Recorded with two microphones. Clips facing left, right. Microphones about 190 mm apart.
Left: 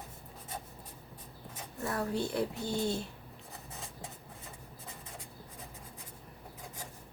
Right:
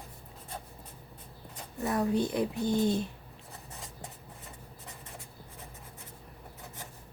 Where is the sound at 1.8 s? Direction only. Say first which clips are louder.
Right 5 dB; 20° right (ahead or behind).